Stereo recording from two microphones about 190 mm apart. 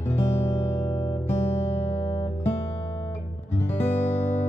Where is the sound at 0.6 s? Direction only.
30° left (ahead or behind).